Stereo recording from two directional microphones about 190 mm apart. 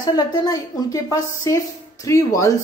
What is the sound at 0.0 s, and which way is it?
A woman's voice, 20° left (ahead or behind).